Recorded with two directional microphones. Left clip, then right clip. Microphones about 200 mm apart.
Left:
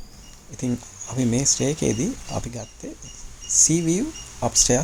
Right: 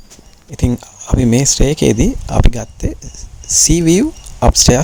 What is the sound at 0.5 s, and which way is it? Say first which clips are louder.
Speech: right 9 dB; 40° right (ahead or behind).